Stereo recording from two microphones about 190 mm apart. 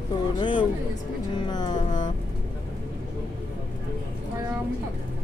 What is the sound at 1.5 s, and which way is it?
Music, 20° left (ahead or behind).